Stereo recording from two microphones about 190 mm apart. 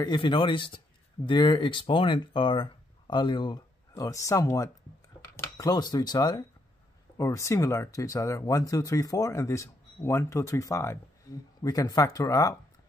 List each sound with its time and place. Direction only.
0.0 s speech: 25° left (ahead or behind)